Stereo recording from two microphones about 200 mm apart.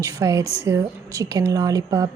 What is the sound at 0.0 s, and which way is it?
A woman's voice, 15° right (ahead or behind).